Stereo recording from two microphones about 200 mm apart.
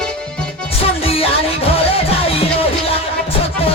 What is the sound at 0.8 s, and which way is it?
Music, 30° left (ahead or behind).